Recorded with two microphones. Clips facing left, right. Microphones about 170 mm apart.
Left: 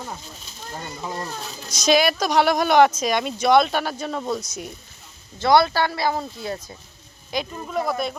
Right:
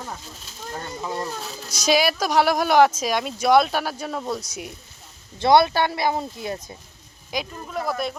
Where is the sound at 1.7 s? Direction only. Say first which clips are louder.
Left 2 dB; 10° right (ahead or behind).